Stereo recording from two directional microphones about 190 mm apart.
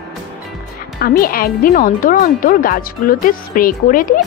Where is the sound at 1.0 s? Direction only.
50° left (ahead or behind).